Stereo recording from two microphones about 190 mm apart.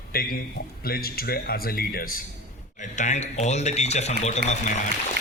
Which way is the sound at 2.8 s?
40° left (ahead or behind).